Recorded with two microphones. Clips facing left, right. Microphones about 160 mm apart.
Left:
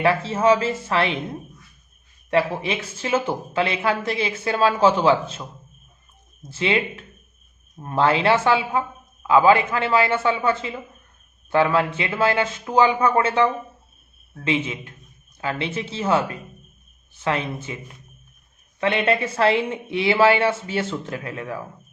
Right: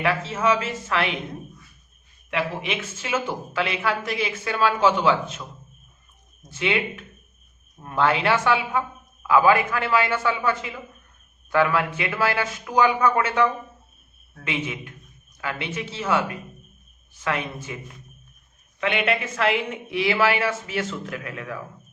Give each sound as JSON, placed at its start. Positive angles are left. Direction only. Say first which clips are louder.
{"t": 0.0, "sound": "speech", "louder": "left 4 dB", "side_deg": 30}
{"t": 2.3, "sound": "speech", "louder": "left 5 dB", "side_deg": 35}
{"t": 6.5, "sound": "speech", "louder": "left 2 dB", "side_deg": 30}
{"t": 18.8, "sound": "speech", "louder": "left 3 dB", "side_deg": 30}